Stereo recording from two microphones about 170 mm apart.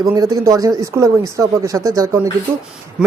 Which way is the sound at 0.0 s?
20° right (ahead or behind).